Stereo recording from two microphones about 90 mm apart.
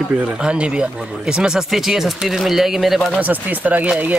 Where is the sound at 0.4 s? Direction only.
10° right (ahead or behind).